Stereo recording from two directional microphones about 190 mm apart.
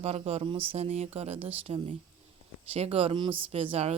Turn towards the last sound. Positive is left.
turn(degrees=-30)  # may be behind; listen again after turning